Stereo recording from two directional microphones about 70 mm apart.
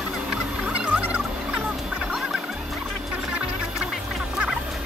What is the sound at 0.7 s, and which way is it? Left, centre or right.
Music, centre.